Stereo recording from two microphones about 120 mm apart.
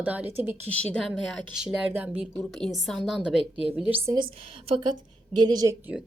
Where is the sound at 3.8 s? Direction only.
15° right (ahead or behind).